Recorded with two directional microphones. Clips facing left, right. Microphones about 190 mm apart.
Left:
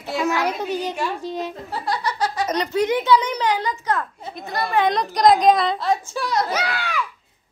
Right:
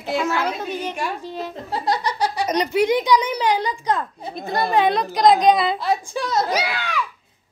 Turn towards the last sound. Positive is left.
turn(degrees=5)  # may be behind; listen again after turning